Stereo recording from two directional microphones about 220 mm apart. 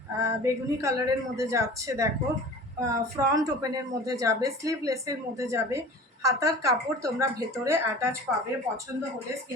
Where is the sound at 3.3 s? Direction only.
15° right (ahead or behind).